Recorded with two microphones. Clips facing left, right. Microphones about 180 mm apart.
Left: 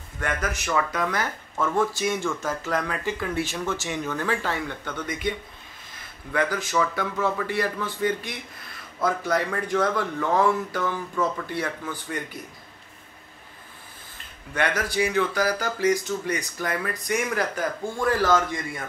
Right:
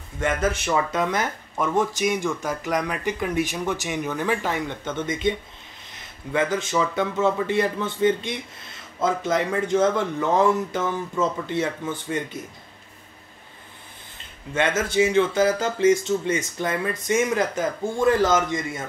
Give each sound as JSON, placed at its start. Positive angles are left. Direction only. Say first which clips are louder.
{"t": 0.2, "sound": "speech", "louder": "right 5 dB", "side_deg": -25}
{"t": 6.3, "sound": "a man's voice", "louder": "right 2 dB", "side_deg": -20}
{"t": 14.5, "sound": "a man's voice", "louder": "right 3 dB", "side_deg": -20}